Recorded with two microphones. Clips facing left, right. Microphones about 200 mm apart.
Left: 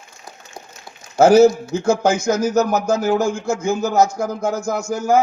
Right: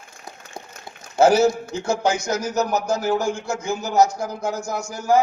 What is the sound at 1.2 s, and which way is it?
A man's voice, 45° left (ahead or behind).